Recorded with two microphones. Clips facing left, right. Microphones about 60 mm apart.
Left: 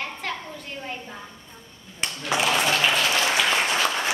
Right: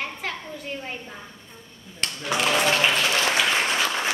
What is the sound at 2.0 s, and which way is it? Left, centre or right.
Speech, centre.